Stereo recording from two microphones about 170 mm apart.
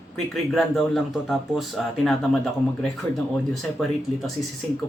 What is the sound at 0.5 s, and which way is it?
Speech, centre (ahead or behind).